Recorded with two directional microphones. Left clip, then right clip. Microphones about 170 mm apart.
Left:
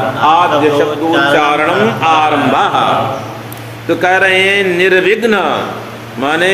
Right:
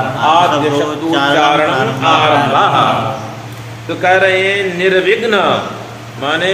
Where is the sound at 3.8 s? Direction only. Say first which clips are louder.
Left 1 dB; 60° left (ahead or behind).